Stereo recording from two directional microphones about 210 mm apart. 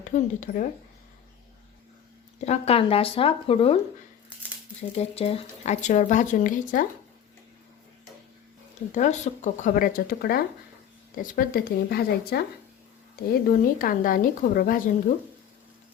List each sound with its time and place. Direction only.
0.0 s speech: 35° left (ahead or behind)
2.4 s speech: 30° left (ahead or behind)
4.8 s speech: 30° left (ahead or behind)
8.9 s speech: 35° left (ahead or behind)
13.5 s speech: 45° left (ahead or behind)